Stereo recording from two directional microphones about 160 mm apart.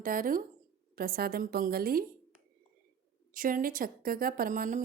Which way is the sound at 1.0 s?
70° right (ahead or behind).